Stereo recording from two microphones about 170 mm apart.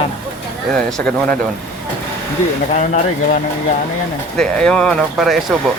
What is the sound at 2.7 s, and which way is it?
Speech, 45° left (ahead or behind).